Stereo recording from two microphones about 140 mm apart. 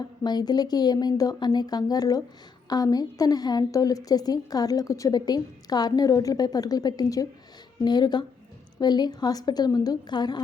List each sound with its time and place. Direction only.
0.0 s a woman's voice: 30° left (ahead or behind)